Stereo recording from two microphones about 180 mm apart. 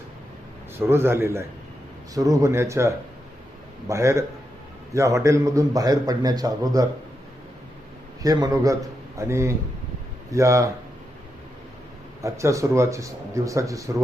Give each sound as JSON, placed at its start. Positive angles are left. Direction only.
{"t": 0.8, "sound": "a man's voice", "side_deg": -15}
{"t": 8.2, "sound": "speech", "side_deg": -20}
{"t": 12.2, "sound": "speech", "side_deg": -15}